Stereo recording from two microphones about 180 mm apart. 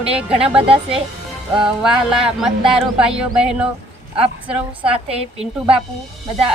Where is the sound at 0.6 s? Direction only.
30° right (ahead or behind).